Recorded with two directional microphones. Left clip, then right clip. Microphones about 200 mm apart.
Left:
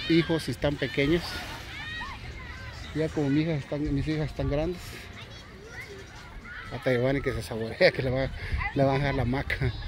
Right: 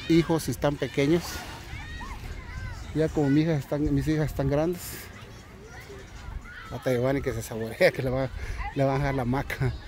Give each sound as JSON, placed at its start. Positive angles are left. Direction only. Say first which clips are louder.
{"t": 0.0, "sound": "speech", "louder": "right 1 dB", "side_deg": -15}
{"t": 3.0, "sound": "speech", "louder": "right 3 dB", "side_deg": -30}
{"t": 6.7, "sound": "speech", "louder": "even", "side_deg": -15}